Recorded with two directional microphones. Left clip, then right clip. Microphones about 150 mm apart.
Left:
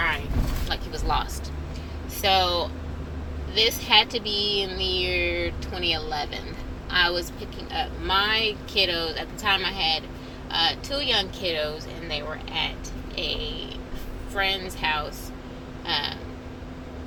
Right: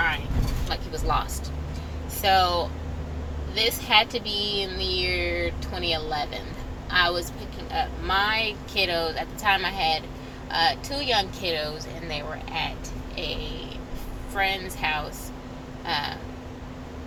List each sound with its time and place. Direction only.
0.7 s a sound: 25° right (ahead or behind)
2.2 s speech: 20° right (ahead or behind)
14.3 s speech: 30° right (ahead or behind)